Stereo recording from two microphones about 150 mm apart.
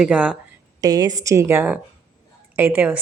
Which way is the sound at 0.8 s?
25° right (ahead or behind).